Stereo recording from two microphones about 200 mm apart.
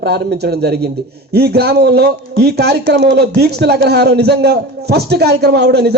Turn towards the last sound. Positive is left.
turn(degrees=-55)  # may be behind; listen again after turning